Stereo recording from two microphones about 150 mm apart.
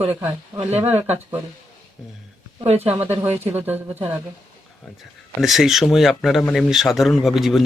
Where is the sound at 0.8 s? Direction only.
15° right (ahead or behind).